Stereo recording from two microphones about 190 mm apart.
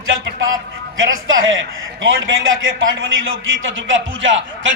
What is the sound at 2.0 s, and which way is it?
A man's voice, 90° right.